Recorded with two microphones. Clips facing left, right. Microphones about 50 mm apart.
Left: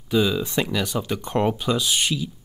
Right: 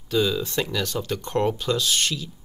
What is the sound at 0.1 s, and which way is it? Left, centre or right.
Speech, centre.